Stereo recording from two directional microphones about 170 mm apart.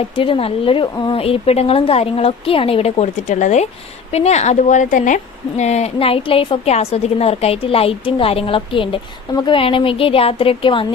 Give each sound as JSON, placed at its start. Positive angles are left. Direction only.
{"t": 0.2, "sound": "a woman's voice", "side_deg": 30}